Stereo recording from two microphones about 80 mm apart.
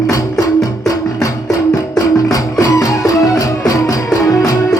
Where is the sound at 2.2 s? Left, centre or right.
Left.